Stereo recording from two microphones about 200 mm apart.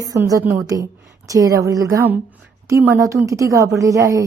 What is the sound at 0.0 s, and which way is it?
A woman's voice, 15° right (ahead or behind).